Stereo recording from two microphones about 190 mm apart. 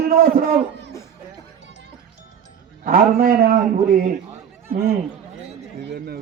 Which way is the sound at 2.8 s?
50° right (ahead or behind).